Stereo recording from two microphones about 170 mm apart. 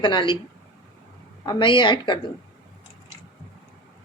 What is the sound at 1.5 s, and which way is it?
Speech, 25° left (ahead or behind).